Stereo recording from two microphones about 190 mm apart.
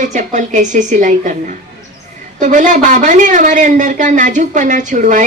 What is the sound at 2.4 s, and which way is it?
A woman's voice, 40° right (ahead or behind).